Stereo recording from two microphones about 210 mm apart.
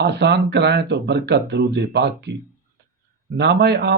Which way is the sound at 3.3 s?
55° right (ahead or behind).